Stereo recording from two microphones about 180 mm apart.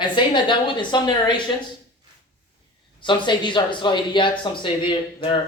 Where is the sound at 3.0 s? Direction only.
25° left (ahead or behind).